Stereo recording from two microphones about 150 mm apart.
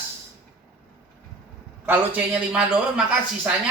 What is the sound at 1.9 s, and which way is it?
A man's voice, 10° right (ahead or behind).